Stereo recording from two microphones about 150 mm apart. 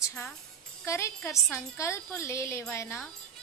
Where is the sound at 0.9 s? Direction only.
20° left (ahead or behind).